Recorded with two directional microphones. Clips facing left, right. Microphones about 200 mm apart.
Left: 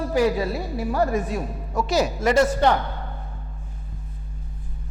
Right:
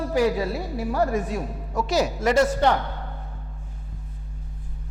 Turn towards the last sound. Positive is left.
turn(degrees=15)  # may be behind; listen again after turning